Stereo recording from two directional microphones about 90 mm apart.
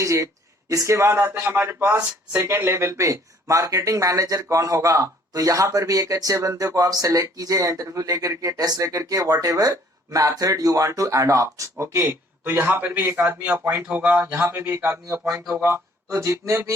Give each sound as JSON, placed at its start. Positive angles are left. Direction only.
{"t": 0.0, "sound": "speech", "side_deg": -35}
{"t": 13.8, "sound": "speech", "side_deg": -15}
{"t": 14.4, "sound": "speech", "side_deg": -35}
{"t": 15.1, "sound": "speech", "side_deg": -5}
{"t": 15.6, "sound": "speech", "side_deg": -30}